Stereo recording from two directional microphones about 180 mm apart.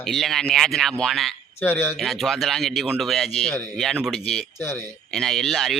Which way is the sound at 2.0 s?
Centre (ahead or behind).